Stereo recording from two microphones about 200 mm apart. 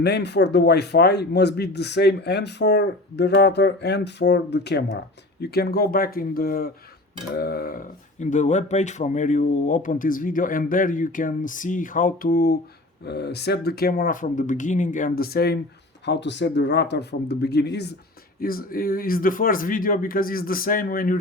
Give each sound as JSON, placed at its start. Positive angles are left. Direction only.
{"t": 0.0, "sound": "a man's voice", "side_deg": 55}
{"t": 16.0, "sound": "a man's voice", "side_deg": 60}